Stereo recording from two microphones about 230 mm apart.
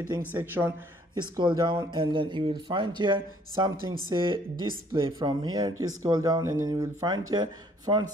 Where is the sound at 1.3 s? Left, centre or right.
Centre.